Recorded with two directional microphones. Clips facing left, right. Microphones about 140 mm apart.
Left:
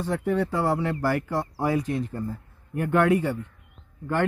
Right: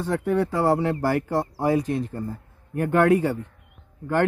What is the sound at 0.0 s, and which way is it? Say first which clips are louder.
Speech: right 2 dB; 55° right (ahead or behind).